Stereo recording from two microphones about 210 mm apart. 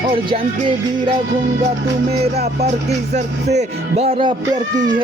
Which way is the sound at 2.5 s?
30° right (ahead or behind).